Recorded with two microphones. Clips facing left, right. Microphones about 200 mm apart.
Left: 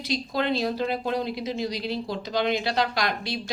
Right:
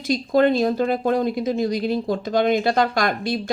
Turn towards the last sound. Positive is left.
turn(degrees=-50)  # may be behind; listen again after turning